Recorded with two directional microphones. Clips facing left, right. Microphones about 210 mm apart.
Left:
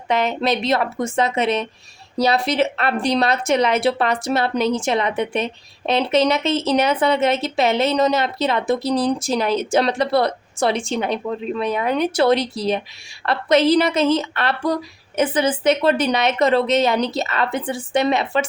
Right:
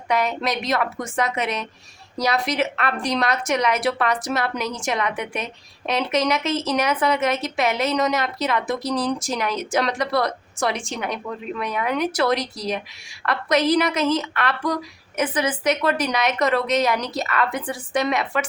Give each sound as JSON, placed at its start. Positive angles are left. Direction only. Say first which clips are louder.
{"t": 0.1, "sound": "a woman's voice", "louder": "left 3 dB", "side_deg": 25}